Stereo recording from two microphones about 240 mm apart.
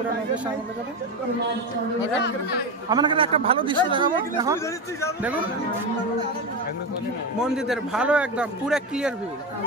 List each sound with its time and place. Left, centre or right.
2.9 s a man's voice: centre
7.5 s a man's voice: centre